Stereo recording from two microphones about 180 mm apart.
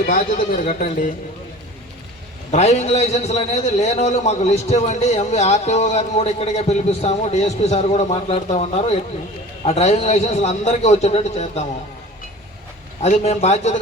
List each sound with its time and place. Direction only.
0.0 s speech: 45° left (ahead or behind)
2.5 s a man's voice: 40° left (ahead or behind)
13.0 s a man's voice: 40° left (ahead or behind)